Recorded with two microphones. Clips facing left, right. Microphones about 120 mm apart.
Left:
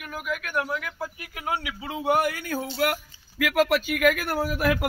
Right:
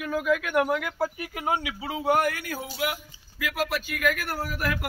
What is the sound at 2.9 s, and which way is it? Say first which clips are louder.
Speech: left 4 dB; 75° left (ahead or behind).